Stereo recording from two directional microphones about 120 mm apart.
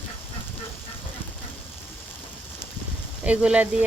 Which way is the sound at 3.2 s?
10° right (ahead or behind).